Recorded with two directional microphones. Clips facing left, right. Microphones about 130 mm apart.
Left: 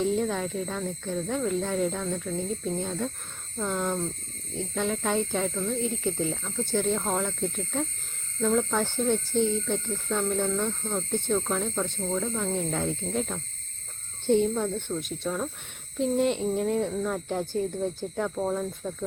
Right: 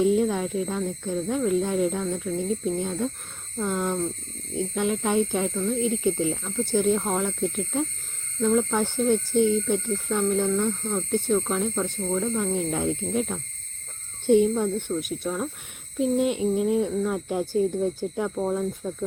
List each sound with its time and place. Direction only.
0.0 s speech: 10° right (ahead or behind)